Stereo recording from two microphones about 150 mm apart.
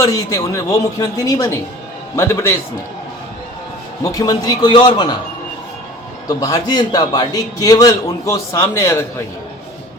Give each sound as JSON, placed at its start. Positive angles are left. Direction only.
{"t": 0.0, "sound": "a man's voice", "side_deg": 20}
{"t": 4.0, "sound": "a man's voice", "side_deg": 25}
{"t": 6.2, "sound": "a man's voice", "side_deg": 25}